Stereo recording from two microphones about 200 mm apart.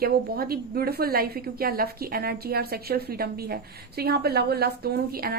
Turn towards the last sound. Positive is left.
turn(degrees=-50)  # may be behind; listen again after turning